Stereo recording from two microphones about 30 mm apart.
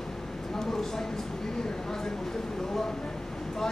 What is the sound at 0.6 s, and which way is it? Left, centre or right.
Speech, centre.